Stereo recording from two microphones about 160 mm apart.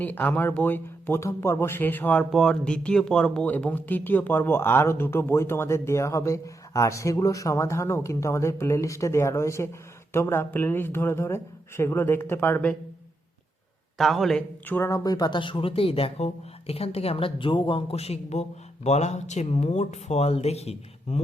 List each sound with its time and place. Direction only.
0.0 s speech: 10° left (ahead or behind)
14.0 s speech: centre (ahead or behind)
14.8 s speech: 20° left (ahead or behind); by 21.2 s 40° left (ahead or behind)